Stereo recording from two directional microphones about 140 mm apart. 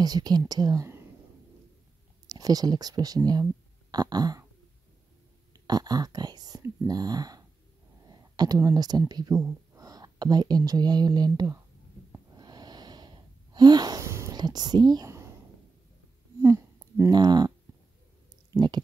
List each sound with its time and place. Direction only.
0.0 s speech: 30° right (ahead or behind)
2.2 s speech: 25° right (ahead or behind)
3.9 s a sound: 30° right (ahead or behind)
5.5 s speech: 30° right (ahead or behind)
12.4 s wheeze: 30° right (ahead or behind)
16.3 s a sound: 20° right (ahead or behind)
17.1 s speech: 30° right (ahead or behind)
18.5 s stomach rumble: 20° right (ahead or behind)